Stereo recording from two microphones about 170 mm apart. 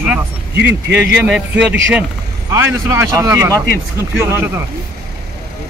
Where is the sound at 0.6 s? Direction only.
90° right.